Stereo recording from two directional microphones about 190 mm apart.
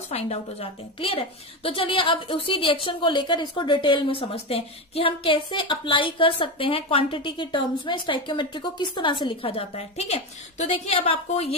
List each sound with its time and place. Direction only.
0.1 s a woman's voice: 30° left (ahead or behind)